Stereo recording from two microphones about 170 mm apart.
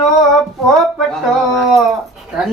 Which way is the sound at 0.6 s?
Centre (ahead or behind).